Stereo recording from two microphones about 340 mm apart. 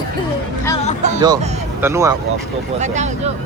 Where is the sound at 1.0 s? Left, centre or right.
Centre.